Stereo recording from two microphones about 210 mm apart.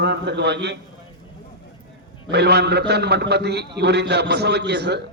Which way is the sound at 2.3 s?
50° right (ahead or behind).